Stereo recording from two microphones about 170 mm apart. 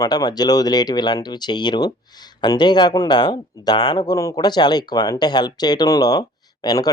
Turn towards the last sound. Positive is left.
turn(degrees=25)  # may be behind; listen again after turning